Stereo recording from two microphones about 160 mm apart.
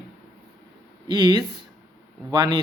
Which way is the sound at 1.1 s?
25° right (ahead or behind).